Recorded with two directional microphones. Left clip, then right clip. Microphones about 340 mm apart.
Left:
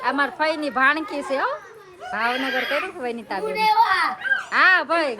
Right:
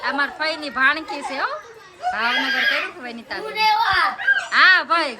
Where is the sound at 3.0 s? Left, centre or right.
Centre.